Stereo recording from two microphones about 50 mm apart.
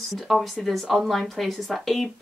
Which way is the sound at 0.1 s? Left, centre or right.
Centre.